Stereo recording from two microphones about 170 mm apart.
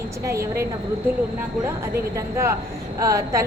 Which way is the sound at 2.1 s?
15° right (ahead or behind).